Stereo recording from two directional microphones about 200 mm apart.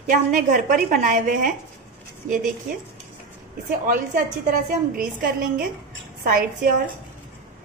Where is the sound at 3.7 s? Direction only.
45° right (ahead or behind).